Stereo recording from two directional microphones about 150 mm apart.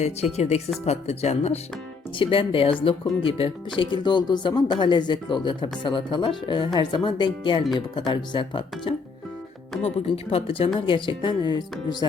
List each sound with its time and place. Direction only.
0.0 s speech: 45° left (ahead or behind); by 12.0 s 30° left (ahead or behind)